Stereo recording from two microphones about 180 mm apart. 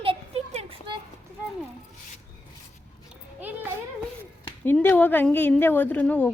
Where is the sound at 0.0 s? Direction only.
35° right (ahead or behind).